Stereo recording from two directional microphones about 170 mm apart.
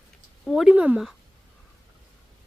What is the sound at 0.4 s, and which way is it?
Speech, centre (ahead or behind).